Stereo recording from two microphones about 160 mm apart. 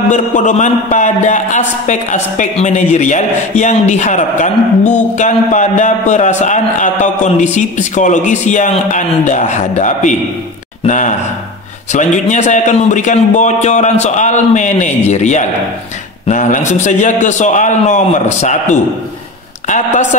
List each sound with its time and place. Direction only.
0.1 s a man's voice: 50° left (ahead or behind)